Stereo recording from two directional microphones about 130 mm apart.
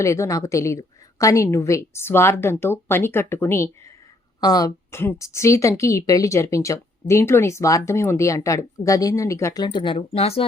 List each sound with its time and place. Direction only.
0.0 s a woman's voice: 25° left (ahead or behind)
4.4 s speech: 30° left (ahead or behind)
4.9 s a woman's voice: 20° left (ahead or behind); by 10.4 s 50° left (ahead or behind)